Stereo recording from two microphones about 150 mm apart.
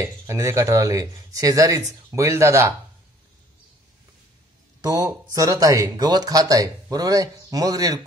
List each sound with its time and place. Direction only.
0.0 s speech: 20° right (ahead or behind)
4.8 s speech: 25° right (ahead or behind)